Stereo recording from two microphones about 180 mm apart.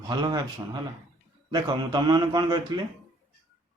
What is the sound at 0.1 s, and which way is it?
Speech, 25° right (ahead or behind).